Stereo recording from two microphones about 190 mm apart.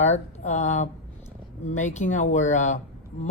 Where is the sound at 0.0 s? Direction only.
40° left (ahead or behind).